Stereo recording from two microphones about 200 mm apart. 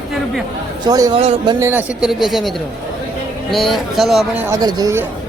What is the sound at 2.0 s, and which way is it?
Speech, centre (ahead or behind).